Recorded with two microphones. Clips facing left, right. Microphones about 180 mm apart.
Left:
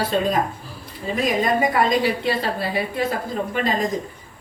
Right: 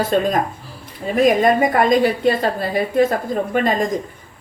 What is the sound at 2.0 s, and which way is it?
Speech, 45° right (ahead or behind).